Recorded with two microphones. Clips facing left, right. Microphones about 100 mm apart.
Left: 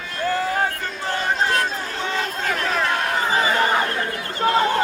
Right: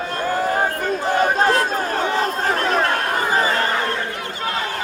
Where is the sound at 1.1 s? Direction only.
50° right (ahead or behind).